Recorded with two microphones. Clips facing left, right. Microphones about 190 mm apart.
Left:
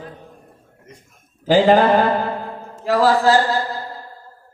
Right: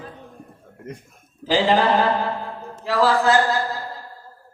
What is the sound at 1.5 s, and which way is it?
A man's voice, 50° left (ahead or behind).